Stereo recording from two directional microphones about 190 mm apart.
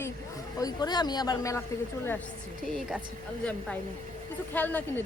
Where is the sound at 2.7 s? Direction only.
Centre (ahead or behind).